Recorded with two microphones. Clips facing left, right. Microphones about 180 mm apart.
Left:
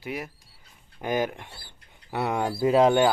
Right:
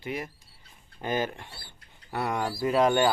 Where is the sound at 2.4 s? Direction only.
30° left (ahead or behind).